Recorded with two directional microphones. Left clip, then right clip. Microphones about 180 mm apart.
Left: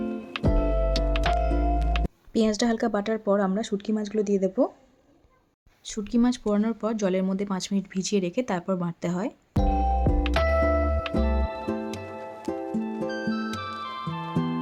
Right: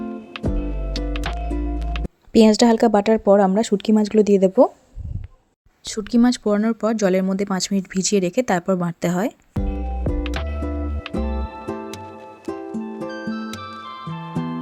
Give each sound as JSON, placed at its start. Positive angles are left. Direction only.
{"t": 0.0, "sound": "music", "side_deg": -5}
{"t": 2.3, "sound": "speech", "side_deg": -45}
{"t": 5.8, "sound": "speech", "side_deg": -35}
{"t": 9.6, "sound": "music", "side_deg": 0}